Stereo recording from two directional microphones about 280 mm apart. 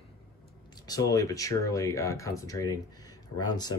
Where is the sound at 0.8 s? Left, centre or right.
Centre.